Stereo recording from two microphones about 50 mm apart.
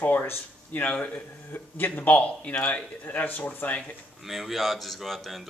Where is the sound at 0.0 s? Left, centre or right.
Left.